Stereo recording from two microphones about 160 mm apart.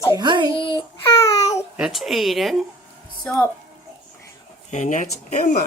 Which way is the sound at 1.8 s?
Centre (ahead or behind).